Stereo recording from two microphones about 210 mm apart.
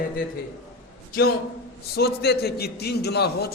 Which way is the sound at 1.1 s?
45° left (ahead or behind).